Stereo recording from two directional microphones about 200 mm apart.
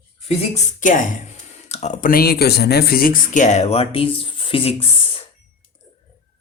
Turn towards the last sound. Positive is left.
turn(degrees=25)  # may be behind; listen again after turning